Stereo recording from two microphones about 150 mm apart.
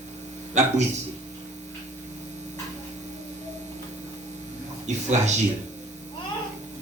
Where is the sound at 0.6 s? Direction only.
50° right (ahead or behind).